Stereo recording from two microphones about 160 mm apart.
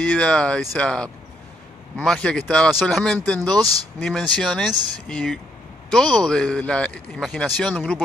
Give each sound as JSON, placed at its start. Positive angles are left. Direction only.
{"t": 0.0, "sound": "a man's voice", "side_deg": 5}
{"t": 3.5, "sound": "speech", "side_deg": -20}
{"t": 4.0, "sound": "a man's voice", "side_deg": 5}